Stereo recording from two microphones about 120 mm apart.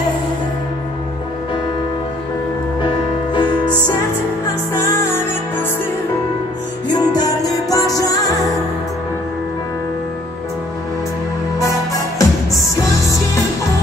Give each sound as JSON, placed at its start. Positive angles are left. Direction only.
{"t": 3.3, "sound": "music", "side_deg": 35}
{"t": 7.0, "sound": "music", "side_deg": 35}
{"t": 11.6, "sound": "music", "side_deg": 30}